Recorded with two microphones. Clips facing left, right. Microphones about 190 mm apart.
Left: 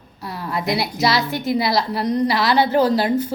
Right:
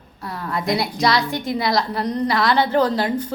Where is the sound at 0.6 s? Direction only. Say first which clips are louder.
Even; 5° left (ahead or behind).